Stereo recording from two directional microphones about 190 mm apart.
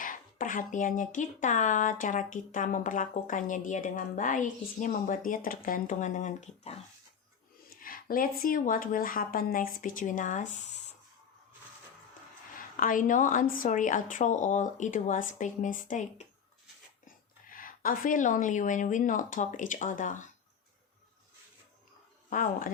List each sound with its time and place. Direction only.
0.0 s speech: 45° left (ahead or behind)
7.8 s speech: 50° left (ahead or behind)
12.5 s a woman's voice: 45° left (ahead or behind)
17.5 s speech: 45° left (ahead or behind)
22.3 s speech: 45° left (ahead or behind)